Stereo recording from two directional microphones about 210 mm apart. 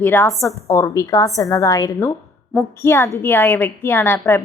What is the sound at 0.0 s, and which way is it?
A woman's voice, 10° left (ahead or behind).